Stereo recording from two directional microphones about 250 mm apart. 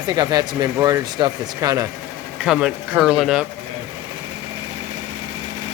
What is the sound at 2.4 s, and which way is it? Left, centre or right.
Speech, centre.